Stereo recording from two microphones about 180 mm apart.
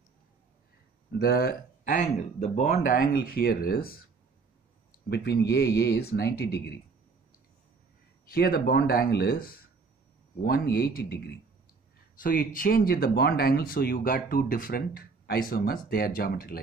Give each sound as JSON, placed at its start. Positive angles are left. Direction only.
{"t": 1.1, "sound": "speech", "side_deg": 60}
{"t": 5.1, "sound": "speech", "side_deg": 65}
{"t": 8.3, "sound": "speech", "side_deg": 55}
{"t": 12.2, "sound": "speech", "side_deg": 50}